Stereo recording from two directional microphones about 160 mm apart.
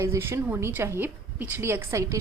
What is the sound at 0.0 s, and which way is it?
A woman's voice, 15° right (ahead or behind).